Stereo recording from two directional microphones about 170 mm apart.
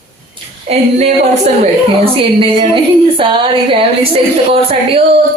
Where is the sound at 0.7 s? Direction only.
40° right (ahead or behind).